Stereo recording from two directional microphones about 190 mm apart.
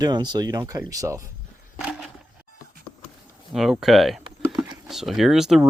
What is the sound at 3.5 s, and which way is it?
Speech, centre (ahead or behind).